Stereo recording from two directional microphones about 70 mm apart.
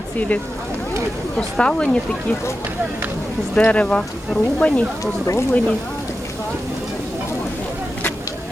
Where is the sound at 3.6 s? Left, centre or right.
Centre.